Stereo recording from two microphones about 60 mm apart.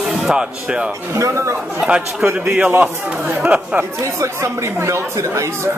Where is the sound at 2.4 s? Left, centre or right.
Right.